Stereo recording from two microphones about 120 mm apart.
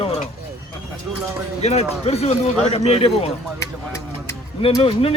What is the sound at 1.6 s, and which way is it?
Speech, 60° left (ahead or behind).